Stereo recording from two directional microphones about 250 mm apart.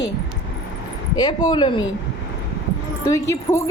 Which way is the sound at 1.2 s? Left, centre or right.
Centre.